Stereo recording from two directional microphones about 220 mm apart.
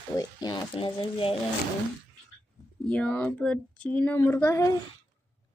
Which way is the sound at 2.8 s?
5° left (ahead or behind).